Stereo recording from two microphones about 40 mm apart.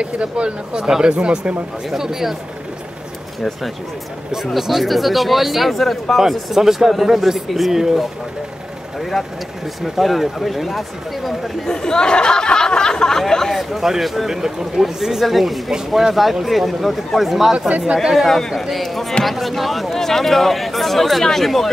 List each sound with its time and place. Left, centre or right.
0.0 s speech: right
0.8 s speech: centre
1.1 s speech: right
1.9 s speech: centre
4.6 s speech: centre
6.5 s speech: centre
9.1 s speech: centre
11.6 s speech: centre
13.6 s speech: centre
17.6 s speech: right
17.9 s speech: centre